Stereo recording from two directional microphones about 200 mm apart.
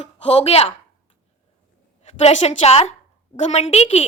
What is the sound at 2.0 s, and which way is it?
A woman's voice, 35° left (ahead or behind).